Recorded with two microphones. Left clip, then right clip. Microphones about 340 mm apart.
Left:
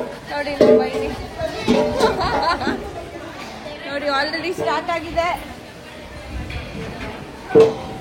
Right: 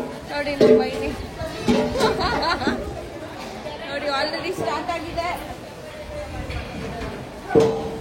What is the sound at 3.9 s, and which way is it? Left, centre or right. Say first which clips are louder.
A woman's voice: left 3 dB; centre.